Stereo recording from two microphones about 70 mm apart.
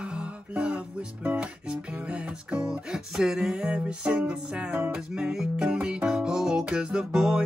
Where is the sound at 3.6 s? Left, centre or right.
Centre.